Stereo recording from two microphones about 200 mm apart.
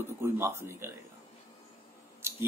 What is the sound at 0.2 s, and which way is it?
Speech, 10° right (ahead or behind).